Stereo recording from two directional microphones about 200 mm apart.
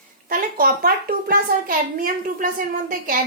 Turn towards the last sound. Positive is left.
turn(degrees=-45)  # may be behind; listen again after turning